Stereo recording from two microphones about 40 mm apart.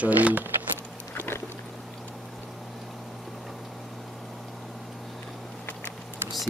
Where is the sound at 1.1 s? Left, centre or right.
Left.